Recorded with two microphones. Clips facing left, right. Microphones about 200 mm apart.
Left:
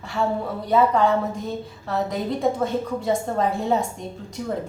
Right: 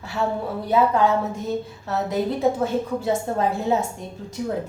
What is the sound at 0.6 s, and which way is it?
A woman's voice, 5° right (ahead or behind).